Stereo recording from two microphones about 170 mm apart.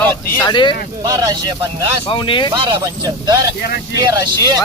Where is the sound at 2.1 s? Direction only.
30° left (ahead or behind).